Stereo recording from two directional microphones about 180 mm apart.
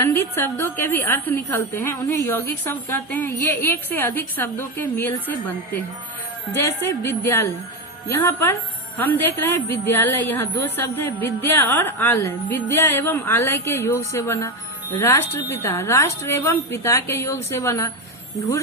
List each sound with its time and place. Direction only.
0.0 s a woman's voice: 15° left (ahead or behind)